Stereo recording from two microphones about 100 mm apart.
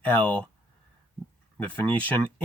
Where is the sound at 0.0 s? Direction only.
15° left (ahead or behind).